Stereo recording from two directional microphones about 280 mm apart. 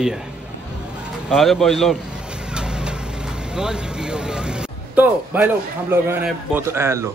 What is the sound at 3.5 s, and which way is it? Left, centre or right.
A man's voice, centre.